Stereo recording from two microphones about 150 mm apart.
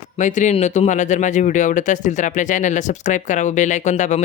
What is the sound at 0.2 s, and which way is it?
Speech, 55° left (ahead or behind).